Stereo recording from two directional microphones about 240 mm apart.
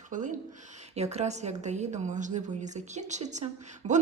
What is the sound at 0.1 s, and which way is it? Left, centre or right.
A woman's voice, right.